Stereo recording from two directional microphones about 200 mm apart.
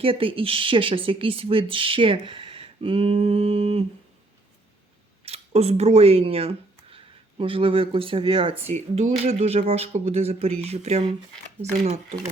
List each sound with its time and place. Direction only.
0.0 s speech: 25° right (ahead or behind)
5.2 s speech: 30° right (ahead or behind)